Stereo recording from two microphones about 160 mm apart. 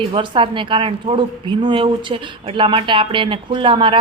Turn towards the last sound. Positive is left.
turn(degrees=-30)  # may be behind; listen again after turning